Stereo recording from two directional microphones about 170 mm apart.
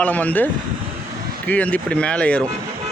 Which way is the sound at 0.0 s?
10° left (ahead or behind).